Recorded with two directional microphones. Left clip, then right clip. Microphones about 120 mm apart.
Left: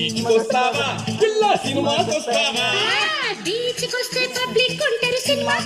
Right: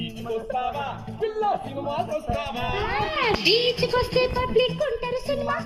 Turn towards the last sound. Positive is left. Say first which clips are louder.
# left 6 dB
turn(degrees=-5)  # may be behind; listen again after turning